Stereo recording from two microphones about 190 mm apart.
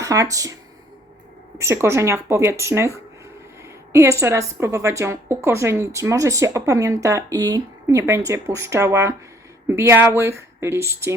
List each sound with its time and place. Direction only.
0.0 s speech: 15° right (ahead or behind)
1.5 s a woman's voice: 15° right (ahead or behind)